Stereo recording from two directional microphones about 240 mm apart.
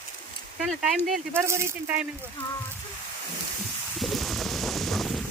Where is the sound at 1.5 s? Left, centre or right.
Centre.